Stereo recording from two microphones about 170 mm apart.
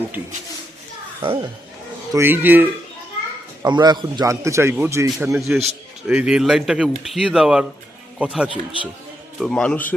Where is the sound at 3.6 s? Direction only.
25° right (ahead or behind).